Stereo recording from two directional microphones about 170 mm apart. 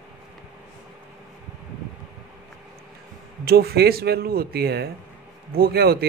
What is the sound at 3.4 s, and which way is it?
Speech, 65° right (ahead or behind).